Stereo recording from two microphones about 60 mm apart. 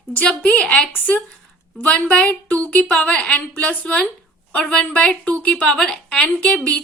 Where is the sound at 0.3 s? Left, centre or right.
Centre.